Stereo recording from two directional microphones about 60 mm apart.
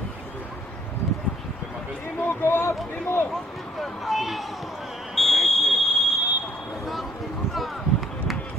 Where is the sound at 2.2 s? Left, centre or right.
Left.